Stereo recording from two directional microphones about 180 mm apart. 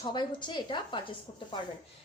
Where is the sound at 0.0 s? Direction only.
25° left (ahead or behind).